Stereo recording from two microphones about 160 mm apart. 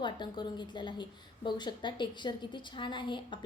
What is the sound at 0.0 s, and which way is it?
A woman's voice, 30° left (ahead or behind).